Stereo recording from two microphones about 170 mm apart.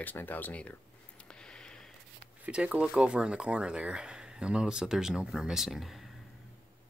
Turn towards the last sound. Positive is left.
turn(degrees=0)  # may be behind; listen again after turning